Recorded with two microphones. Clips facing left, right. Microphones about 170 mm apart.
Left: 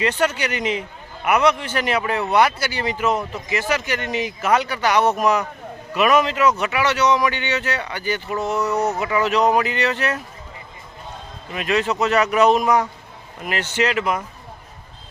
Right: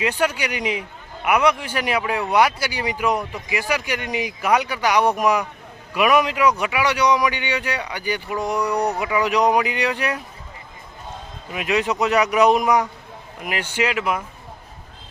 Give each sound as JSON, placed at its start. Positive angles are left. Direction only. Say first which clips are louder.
{"t": 0.0, "sound": "speech", "louder": "left 1 dB", "side_deg": -10}
{"t": 11.5, "sound": "speech", "louder": "left 1 dB", "side_deg": -15}